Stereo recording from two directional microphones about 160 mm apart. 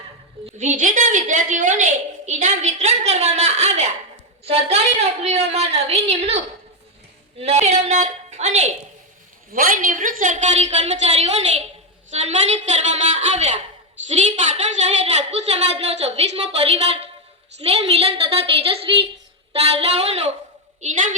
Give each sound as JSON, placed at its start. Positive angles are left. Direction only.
{"t": 0.4, "sound": "a woman's voice", "side_deg": -50}
{"t": 9.5, "sound": "a woman's voice", "side_deg": -65}
{"t": 20.8, "sound": "a woman's voice", "side_deg": -50}